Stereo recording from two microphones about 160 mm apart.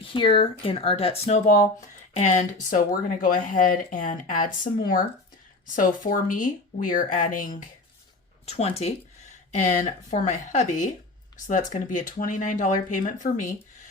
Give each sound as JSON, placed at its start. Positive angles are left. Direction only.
{"t": 0.0, "sound": "speech", "side_deg": 35}
{"t": 8.4, "sound": "speech", "side_deg": 40}